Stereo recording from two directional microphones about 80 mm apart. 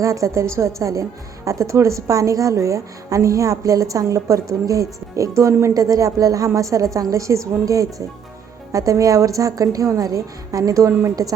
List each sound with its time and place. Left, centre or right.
0.0 s a woman's voice: right